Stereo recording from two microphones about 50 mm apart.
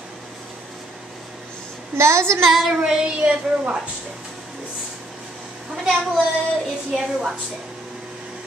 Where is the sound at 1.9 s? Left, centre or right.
Right.